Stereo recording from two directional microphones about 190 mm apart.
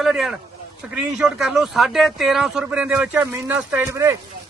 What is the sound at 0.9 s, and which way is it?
A man's voice, 5° right (ahead or behind).